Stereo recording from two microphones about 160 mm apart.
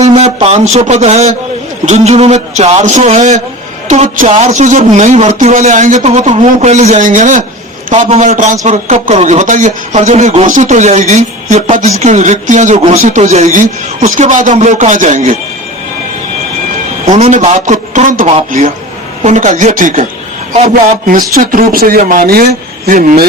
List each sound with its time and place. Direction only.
0.0 s a sound: 45° right (ahead or behind)
0.3 s a man's voice: 45° right (ahead or behind)
17.2 s a man's voice: 45° right (ahead or behind)
21.1 s speech: 60° right (ahead or behind)